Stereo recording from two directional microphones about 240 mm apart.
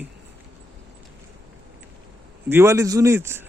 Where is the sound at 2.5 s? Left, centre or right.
Centre.